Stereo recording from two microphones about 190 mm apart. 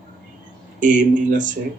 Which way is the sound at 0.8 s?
40° right (ahead or behind).